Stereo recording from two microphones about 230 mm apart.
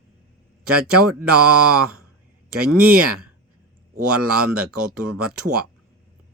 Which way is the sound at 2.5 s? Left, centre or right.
Right.